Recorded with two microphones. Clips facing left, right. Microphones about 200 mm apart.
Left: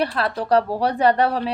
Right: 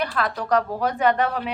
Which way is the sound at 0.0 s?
30° left (ahead or behind).